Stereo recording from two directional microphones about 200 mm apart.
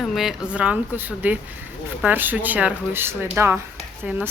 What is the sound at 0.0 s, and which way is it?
Speech, centre (ahead or behind).